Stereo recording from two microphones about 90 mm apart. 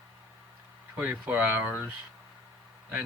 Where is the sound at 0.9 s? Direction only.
15° right (ahead or behind).